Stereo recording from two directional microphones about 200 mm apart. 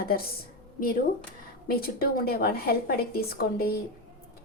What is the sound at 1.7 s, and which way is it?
A woman's voice, 50° left (ahead or behind).